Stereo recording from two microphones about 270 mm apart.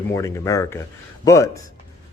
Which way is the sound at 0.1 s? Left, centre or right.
Centre.